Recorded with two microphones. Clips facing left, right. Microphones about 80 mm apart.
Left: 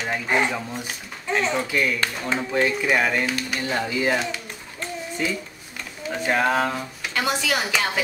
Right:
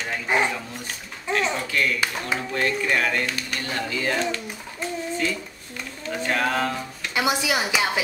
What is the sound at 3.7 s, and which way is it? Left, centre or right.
Speech, centre.